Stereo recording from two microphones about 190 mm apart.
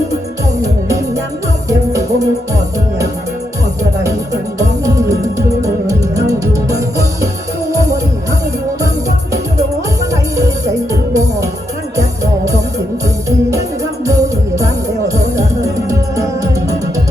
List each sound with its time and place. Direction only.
1.9 s music: 15° right (ahead or behind)
4.9 s music: 15° right (ahead or behind)
10.3 s music: 15° right (ahead or behind)
14.1 s music: 15° right (ahead or behind)